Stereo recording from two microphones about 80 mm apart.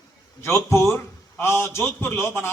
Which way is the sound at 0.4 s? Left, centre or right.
Left.